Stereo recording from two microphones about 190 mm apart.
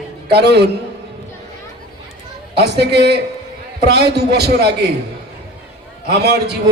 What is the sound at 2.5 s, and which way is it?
A man's voice, 60° right (ahead or behind).